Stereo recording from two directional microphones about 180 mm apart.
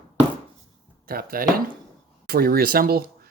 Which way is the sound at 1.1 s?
55° right (ahead or behind).